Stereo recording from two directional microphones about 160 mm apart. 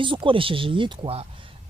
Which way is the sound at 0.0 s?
30° right (ahead or behind).